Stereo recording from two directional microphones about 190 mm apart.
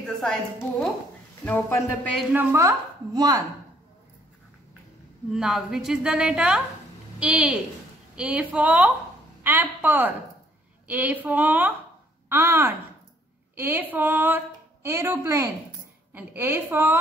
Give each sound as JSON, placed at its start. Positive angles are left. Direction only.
{"t": 0.0, "sound": "a woman's voice", "side_deg": 5}
{"t": 2.3, "sound": "a woman's voice", "side_deg": -15}
{"t": 5.3, "sound": "a woman's voice", "side_deg": -5}